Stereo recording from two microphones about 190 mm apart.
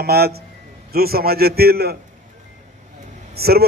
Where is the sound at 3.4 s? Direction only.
55° right (ahead or behind).